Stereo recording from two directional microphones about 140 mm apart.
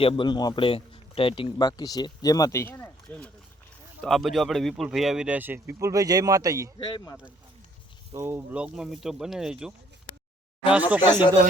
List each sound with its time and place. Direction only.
0.0 s a man's voice: 40° left (ahead or behind); by 3.3 s 10° left (ahead or behind)
4.0 s speech: centre (ahead or behind); by 6.7 s 25° right (ahead or behind)
6.7 s a man's voice: 35° left (ahead or behind)
8.1 s speech: 20° right (ahead or behind)
10.1 s a sound: 35° left (ahead or behind)
10.7 s speech: 10° right (ahead or behind)